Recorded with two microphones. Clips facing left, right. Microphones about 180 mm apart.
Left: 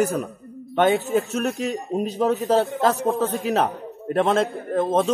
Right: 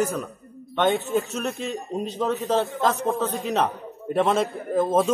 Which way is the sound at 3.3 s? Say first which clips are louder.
Left 2 dB; centre (ahead or behind).